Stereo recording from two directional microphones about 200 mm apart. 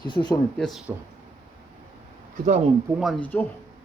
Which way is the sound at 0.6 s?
Centre (ahead or behind).